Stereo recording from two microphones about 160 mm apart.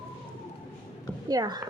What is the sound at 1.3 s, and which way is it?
Speech, 25° right (ahead or behind).